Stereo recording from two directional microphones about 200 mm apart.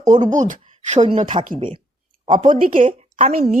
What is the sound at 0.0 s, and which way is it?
A woman's voice, 35° right (ahead or behind).